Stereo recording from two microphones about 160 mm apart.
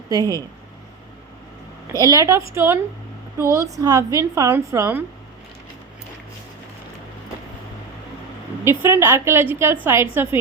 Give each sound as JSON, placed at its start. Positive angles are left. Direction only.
{"t": 0.1, "sound": "speech", "side_deg": -20}
{"t": 1.9, "sound": "a woman's voice", "side_deg": -20}
{"t": 8.6, "sound": "a woman's voice", "side_deg": -15}